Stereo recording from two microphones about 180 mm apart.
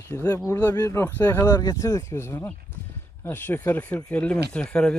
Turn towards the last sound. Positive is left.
turn(degrees=5)  # may be behind; listen again after turning